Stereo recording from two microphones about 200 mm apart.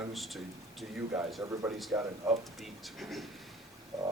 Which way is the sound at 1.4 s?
15° right (ahead or behind).